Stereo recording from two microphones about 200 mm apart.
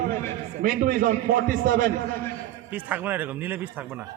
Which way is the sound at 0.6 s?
45° right (ahead or behind).